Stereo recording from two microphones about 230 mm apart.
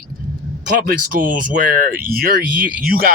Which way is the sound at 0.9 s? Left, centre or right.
Right.